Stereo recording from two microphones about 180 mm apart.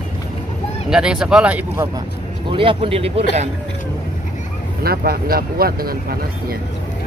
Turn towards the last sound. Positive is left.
turn(degrees=-55)  # may be behind; listen again after turning